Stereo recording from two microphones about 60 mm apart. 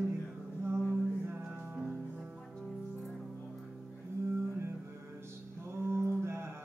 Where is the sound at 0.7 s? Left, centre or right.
Right.